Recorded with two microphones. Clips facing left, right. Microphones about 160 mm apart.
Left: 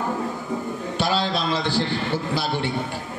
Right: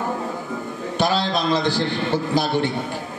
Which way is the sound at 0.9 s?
45° right (ahead or behind).